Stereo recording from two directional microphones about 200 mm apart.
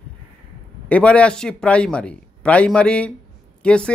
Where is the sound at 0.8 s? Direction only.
5° left (ahead or behind).